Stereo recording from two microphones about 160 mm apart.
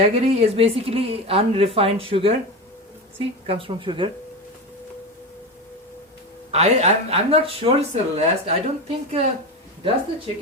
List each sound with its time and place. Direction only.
0.0 s speech: 40° right (ahead or behind)
6.5 s speech: 40° right (ahead or behind)